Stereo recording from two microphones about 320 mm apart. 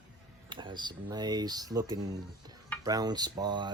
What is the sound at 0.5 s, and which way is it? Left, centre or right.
Speech, centre.